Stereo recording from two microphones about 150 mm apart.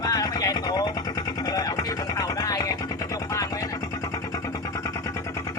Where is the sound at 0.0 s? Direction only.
25° left (ahead or behind).